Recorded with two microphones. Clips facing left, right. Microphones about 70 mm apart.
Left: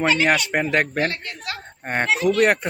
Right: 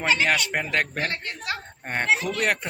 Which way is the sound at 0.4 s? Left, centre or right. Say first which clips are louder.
Left 5 dB; left.